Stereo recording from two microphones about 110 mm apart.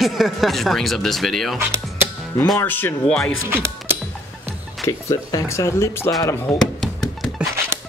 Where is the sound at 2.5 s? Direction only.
20° left (ahead or behind).